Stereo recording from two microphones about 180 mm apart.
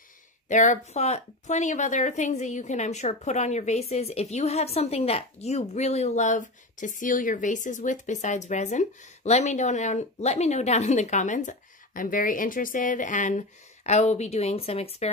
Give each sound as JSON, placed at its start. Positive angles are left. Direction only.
{"t": 0.5, "sound": "speech", "side_deg": 45}